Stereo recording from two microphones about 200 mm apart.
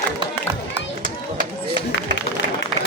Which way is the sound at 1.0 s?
45° right (ahead or behind).